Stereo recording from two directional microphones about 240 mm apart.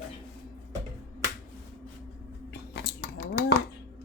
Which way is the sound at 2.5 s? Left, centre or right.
Left.